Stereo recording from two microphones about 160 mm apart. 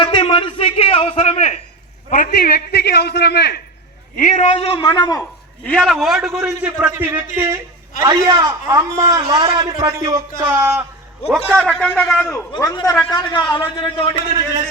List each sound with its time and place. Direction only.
0.0 s a sound: 35° left (ahead or behind)
2.0 s a man's voice: 55° left (ahead or behind); by 3.6 s 90° left
4.2 s a man's voice: 50° left (ahead or behind)
4.8 s a man's voice: 25° left (ahead or behind)
5.6 s a man's voice: 5° left (ahead or behind); by 10.2 s 25° right (ahead or behind)
10.4 s speech: 10° right (ahead or behind)
11.3 s a man's voice: centre (ahead or behind)
12.2 s a man's voice: 20° left (ahead or behind)